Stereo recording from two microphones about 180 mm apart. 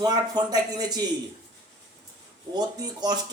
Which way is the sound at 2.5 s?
25° right (ahead or behind).